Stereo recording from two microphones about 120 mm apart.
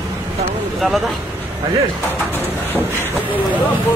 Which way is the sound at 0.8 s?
Centre (ahead or behind).